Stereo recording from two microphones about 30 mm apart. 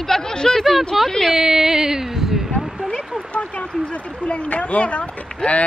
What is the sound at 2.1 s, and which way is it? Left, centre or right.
Speech, centre.